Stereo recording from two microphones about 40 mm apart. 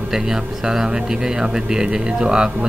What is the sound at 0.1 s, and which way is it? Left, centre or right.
Speech, centre.